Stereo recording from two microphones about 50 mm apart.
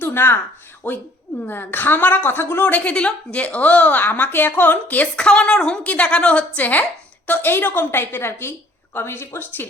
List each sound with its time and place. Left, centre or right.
0.0 s a sound: left
0.8 s a woman's voice: left
1.5 s a woman's voice: left
5.1 s a woman's voice: centre
6.6 s a woman's voice: left
7.5 s a woman's voice: left